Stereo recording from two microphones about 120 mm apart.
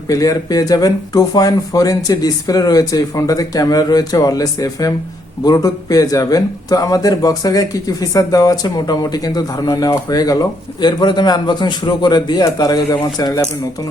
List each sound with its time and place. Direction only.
0.1 s speech: 30° left (ahead or behind)